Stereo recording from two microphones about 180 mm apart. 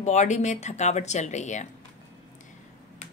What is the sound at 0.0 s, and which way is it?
Speech, 40° left (ahead or behind).